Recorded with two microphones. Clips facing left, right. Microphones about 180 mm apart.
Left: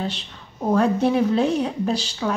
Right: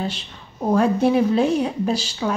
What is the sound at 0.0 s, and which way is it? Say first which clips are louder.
Speech: right 1 dB; 10° right (ahead or behind).